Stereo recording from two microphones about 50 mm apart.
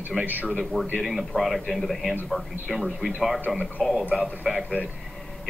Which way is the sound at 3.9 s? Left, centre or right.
Right.